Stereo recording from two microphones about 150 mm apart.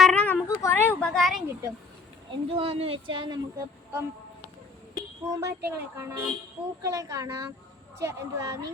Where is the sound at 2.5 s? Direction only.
40° right (ahead or behind).